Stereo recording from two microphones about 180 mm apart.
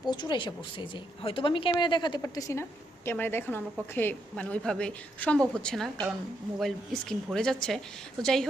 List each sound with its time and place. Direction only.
0.1 s a woman's voice: 25° left (ahead or behind); by 8.4 s centre (ahead or behind)